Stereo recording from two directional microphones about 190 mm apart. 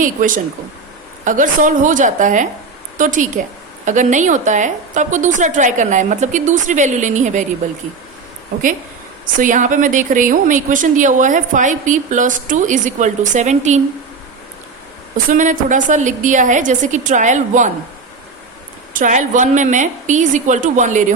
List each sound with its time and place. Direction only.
0.0 s a woman's voice: 45° right (ahead or behind)
9.4 s a woman's voice: 45° right (ahead or behind)
15.3 s a woman's voice: 40° right (ahead or behind)
18.9 s a woman's voice: 40° right (ahead or behind)